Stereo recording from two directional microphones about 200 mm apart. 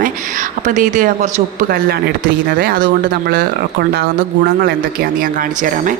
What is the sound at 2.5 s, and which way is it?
Speech, 45° right (ahead or behind).